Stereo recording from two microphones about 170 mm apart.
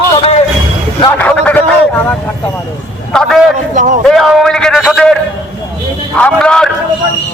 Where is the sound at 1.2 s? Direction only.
5° left (ahead or behind).